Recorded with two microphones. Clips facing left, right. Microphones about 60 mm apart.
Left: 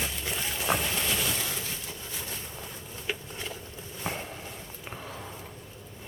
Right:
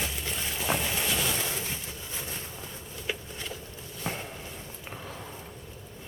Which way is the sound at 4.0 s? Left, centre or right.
Centre.